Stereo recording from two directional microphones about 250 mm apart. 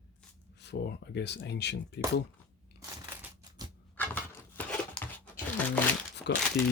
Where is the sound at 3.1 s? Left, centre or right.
Centre.